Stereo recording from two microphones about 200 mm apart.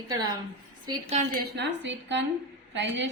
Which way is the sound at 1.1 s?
45° right (ahead or behind).